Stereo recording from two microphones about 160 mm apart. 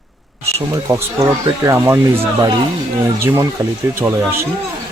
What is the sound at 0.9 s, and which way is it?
Speech, 20° right (ahead or behind).